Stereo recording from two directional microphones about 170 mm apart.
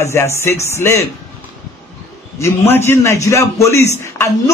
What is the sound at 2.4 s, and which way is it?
A man's voice, 15° left (ahead or behind).